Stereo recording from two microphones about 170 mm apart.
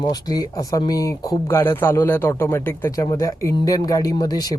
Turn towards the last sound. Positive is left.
turn(degrees=20)  # may be behind; listen again after turning